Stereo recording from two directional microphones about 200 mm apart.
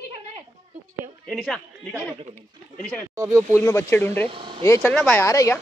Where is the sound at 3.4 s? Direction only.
10° left (ahead or behind).